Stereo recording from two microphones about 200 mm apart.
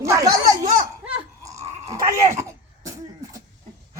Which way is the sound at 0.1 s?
15° right (ahead or behind).